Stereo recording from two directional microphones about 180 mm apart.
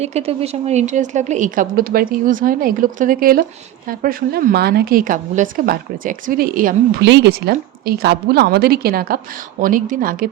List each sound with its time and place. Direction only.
0.0 s a woman's voice: 35° right (ahead or behind)
7.0 s a woman's voice: 70° right (ahead or behind); by 10.2 s 50° right (ahead or behind)